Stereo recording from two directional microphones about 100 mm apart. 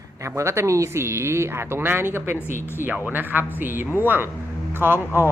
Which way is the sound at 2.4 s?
25° left (ahead or behind).